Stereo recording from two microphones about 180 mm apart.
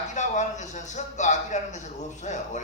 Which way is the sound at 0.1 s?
40° left (ahead or behind).